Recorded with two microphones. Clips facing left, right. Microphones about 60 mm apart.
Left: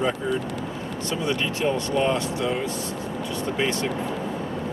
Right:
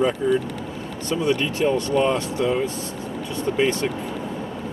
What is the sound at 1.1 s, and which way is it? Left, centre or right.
Speech, right.